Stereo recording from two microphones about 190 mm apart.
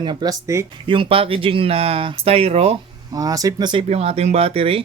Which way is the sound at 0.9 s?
25° right (ahead or behind).